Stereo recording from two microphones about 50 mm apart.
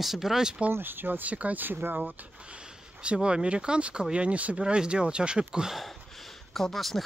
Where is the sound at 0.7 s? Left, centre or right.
Right.